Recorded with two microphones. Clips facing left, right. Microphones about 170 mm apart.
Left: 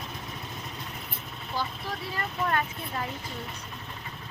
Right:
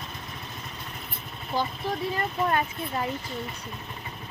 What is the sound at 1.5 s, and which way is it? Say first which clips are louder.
Speech: right 5 dB; 20° right (ahead or behind).